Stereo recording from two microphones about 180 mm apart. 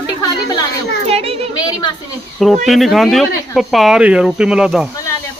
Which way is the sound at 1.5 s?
20° left (ahead or behind).